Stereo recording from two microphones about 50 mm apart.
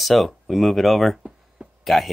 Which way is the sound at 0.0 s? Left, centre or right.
Centre.